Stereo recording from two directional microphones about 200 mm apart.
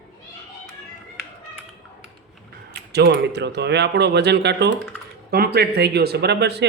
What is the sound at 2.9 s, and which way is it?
Speech, 55° right (ahead or behind).